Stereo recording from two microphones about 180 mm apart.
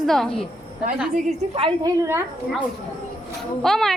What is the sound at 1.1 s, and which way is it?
Speech, 35° right (ahead or behind).